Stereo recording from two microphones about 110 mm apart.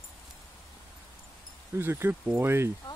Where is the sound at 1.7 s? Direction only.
20° right (ahead or behind).